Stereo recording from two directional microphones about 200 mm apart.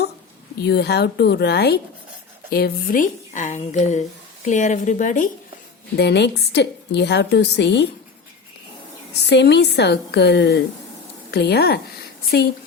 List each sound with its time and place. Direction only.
0.6 s speech: 55° left (ahead or behind); by 5.3 s 40° left (ahead or behind)
6.0 s a woman's voice: 55° left (ahead or behind)
9.2 s a woman's voice: 55° left (ahead or behind)